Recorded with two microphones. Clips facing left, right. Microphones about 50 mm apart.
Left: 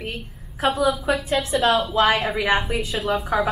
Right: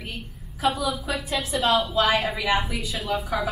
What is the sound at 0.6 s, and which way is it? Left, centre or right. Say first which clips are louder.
Speech: left 4 dB; left.